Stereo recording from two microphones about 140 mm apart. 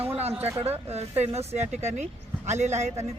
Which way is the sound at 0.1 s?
50° right (ahead or behind).